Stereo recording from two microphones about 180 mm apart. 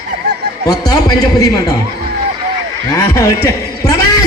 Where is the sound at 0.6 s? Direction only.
20° left (ahead or behind).